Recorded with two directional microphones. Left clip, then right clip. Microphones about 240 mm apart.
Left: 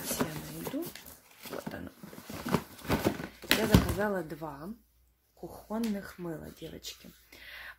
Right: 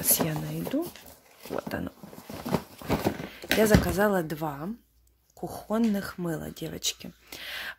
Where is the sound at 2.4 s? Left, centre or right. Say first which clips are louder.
Right 2 dB; centre.